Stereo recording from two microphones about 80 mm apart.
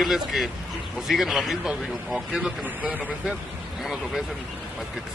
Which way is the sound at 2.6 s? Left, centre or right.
Centre.